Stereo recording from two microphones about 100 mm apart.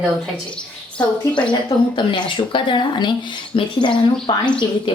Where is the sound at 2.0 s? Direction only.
55° left (ahead or behind).